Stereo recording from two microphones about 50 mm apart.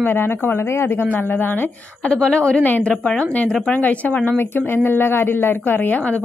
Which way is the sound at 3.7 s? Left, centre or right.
Left.